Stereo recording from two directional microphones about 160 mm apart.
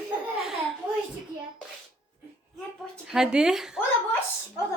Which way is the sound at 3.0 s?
5° right (ahead or behind).